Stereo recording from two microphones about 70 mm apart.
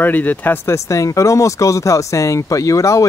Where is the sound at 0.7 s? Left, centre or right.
Left.